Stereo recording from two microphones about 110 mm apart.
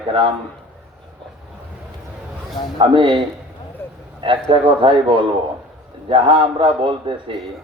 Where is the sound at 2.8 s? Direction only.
45° right (ahead or behind).